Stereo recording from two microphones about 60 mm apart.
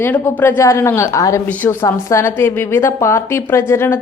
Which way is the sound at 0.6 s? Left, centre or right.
Left.